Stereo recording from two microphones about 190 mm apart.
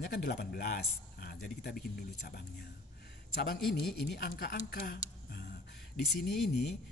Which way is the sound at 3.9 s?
60° left (ahead or behind).